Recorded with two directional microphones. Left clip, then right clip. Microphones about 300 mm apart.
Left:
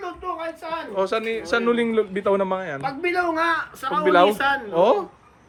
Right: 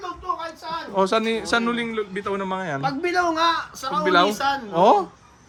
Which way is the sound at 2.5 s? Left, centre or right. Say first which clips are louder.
Even; centre.